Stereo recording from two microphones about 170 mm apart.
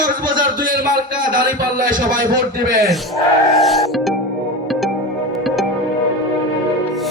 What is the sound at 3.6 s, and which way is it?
Music, centre (ahead or behind).